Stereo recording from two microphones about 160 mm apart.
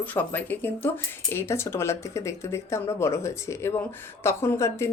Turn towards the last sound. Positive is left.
turn(degrees=15)  # may be behind; listen again after turning